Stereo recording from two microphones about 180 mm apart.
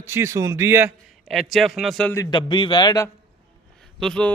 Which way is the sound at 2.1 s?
20° left (ahead or behind).